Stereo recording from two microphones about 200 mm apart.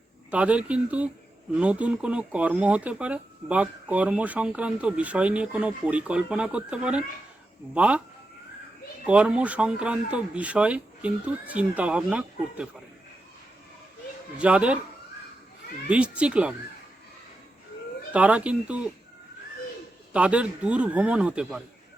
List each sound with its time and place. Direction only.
0.3 s speech: 5° right (ahead or behind)
9.0 s speech: 5° right (ahead or behind)
14.3 s speech: 5° right (ahead or behind)
15.9 s speech: 5° right (ahead or behind)
18.1 s speech: 5° right (ahead or behind)
20.1 s speech: 5° right (ahead or behind)